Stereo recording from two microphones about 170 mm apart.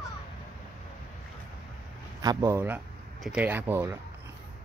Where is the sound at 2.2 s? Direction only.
20° right (ahead or behind).